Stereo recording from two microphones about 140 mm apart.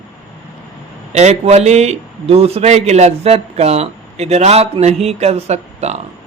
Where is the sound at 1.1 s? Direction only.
50° right (ahead or behind).